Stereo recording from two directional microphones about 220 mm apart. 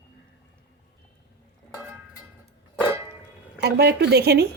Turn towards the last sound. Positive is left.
turn(degrees=-45)  # may be behind; listen again after turning